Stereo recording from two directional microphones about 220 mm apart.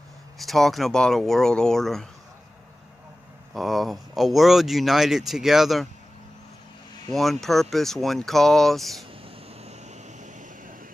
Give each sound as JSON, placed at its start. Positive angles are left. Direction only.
{"t": 0.4, "sound": "speech", "side_deg": 0}
{"t": 3.5, "sound": "speech", "side_deg": 0}
{"t": 7.1, "sound": "speech", "side_deg": 0}
{"t": 9.2, "sound": "vehicle", "side_deg": -30}